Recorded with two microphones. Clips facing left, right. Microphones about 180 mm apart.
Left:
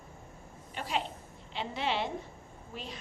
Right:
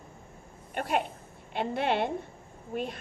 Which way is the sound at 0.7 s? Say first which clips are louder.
Right 5 dB; 55° right (ahead or behind).